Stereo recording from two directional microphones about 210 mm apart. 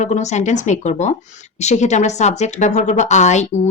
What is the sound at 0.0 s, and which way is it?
Speech, 35° left (ahead or behind).